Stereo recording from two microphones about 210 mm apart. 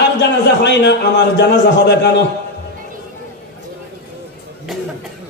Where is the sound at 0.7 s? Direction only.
55° left (ahead or behind).